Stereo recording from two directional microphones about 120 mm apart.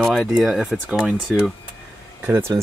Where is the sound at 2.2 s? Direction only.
20° right (ahead or behind).